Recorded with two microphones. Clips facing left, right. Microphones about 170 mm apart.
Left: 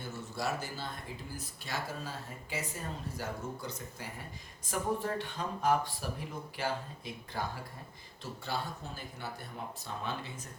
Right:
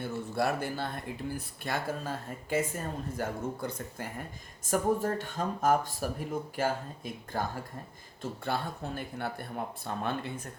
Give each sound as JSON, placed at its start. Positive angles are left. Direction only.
{"t": 0.0, "sound": "speech", "side_deg": -60}
{"t": 8.2, "sound": "speech", "side_deg": -60}